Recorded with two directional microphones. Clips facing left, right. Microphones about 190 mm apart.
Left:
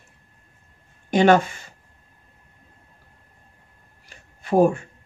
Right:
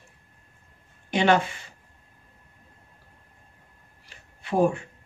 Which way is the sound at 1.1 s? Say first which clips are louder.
Left 5 dB; 45° left (ahead or behind).